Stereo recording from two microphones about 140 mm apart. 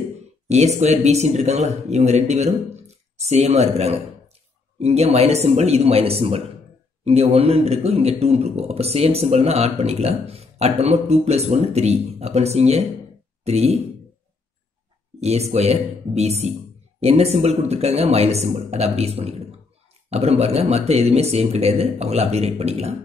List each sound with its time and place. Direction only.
0.5 s speech: 50° right (ahead or behind)
15.1 s speech: 50° right (ahead or behind)